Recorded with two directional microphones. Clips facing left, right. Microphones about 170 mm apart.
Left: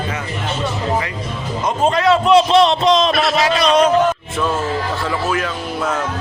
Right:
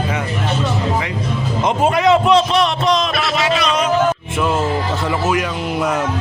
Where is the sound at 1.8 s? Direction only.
15° right (ahead or behind).